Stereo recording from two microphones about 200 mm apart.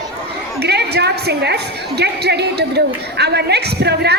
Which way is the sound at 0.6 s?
55° right (ahead or behind).